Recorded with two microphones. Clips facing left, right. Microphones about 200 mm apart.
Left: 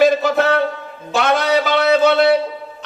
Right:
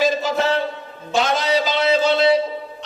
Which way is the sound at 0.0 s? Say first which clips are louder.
Left 5 dB; 60° left (ahead or behind).